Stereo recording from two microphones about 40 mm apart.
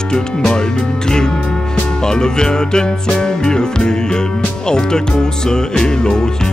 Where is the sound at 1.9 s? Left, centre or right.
Centre.